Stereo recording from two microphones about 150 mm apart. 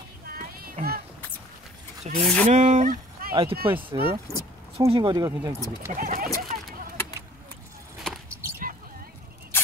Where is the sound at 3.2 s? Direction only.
80° right.